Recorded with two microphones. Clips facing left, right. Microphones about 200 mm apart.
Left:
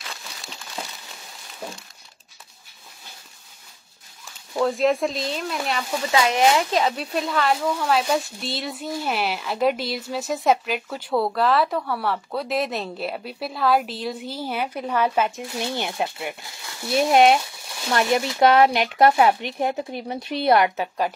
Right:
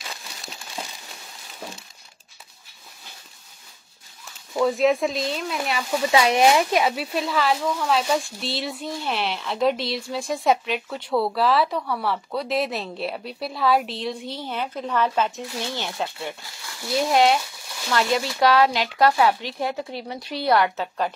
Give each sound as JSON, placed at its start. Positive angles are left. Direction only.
{"t": 4.6, "sound": "speech", "side_deg": 0}
{"t": 6.1, "sound": "speech", "side_deg": -20}